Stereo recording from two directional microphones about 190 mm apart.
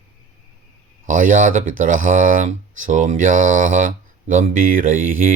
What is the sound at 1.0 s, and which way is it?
Speech, 45° right (ahead or behind).